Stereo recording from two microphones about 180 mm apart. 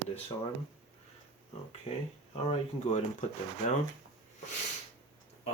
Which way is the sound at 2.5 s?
40° left (ahead or behind).